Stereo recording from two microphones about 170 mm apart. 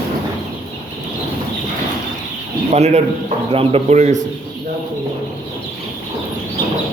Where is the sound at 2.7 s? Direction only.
40° right (ahead or behind).